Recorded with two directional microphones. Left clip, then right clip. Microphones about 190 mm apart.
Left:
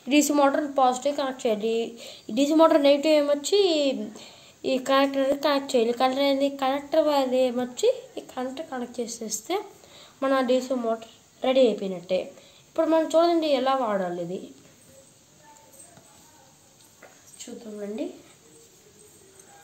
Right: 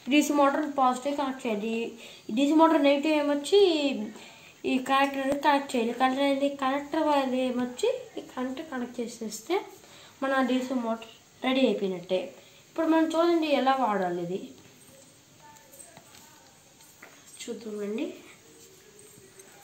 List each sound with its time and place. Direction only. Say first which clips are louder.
0.1 s a woman's voice: left 2 dB; 45° left (ahead or behind)
10.2 s a woman's voice: left 4 dB; 55° left (ahead or behind)